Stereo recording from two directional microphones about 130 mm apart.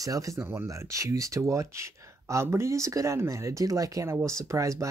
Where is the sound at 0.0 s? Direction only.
25° right (ahead or behind).